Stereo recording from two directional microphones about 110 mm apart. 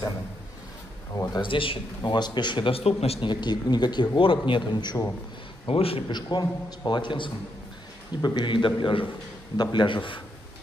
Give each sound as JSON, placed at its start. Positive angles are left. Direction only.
{"t": 1.1, "sound": "speech", "side_deg": 30}
{"t": 1.4, "sound": "a man's voice", "side_deg": 50}
{"t": 3.3, "sound": "a man's voice", "side_deg": 40}
{"t": 5.7, "sound": "a man's voice", "side_deg": 60}
{"t": 6.1, "sound": "a man's voice", "side_deg": 35}